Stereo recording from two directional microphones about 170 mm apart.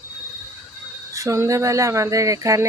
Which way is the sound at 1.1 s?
20° right (ahead or behind).